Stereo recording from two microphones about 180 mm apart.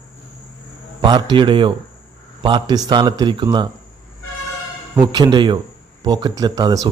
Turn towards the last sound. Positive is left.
turn(degrees=-20)  # may be behind; listen again after turning